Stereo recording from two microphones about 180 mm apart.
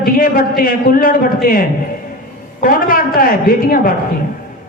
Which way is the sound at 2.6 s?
50° left (ahead or behind).